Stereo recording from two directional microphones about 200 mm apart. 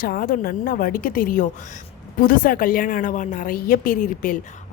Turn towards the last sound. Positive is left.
turn(degrees=40)  # may be behind; listen again after turning